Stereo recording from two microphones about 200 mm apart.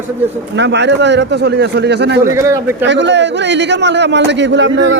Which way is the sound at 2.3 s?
15° right (ahead or behind).